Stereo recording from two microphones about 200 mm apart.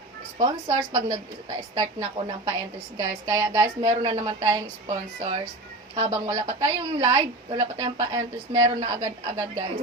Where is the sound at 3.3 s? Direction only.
15° right (ahead or behind).